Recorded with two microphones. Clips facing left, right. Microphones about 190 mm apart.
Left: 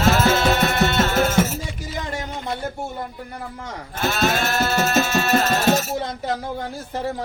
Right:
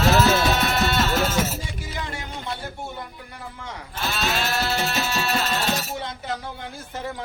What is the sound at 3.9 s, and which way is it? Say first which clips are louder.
Music: left 6 dB; 50° left (ahead or behind).